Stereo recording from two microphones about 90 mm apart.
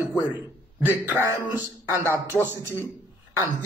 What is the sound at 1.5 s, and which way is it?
Speech, 45° left (ahead or behind).